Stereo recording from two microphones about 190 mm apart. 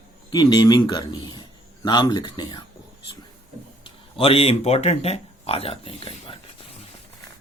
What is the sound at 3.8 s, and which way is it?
Speech, 30° left (ahead or behind).